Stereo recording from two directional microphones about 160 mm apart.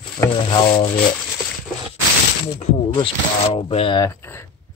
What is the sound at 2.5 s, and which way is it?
Speech, 35° left (ahead or behind).